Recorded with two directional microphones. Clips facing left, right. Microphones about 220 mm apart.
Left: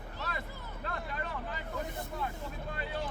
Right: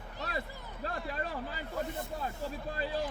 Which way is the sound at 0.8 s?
35° right (ahead or behind).